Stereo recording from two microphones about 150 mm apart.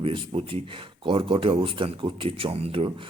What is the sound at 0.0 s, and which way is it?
Speech, 35° right (ahead or behind).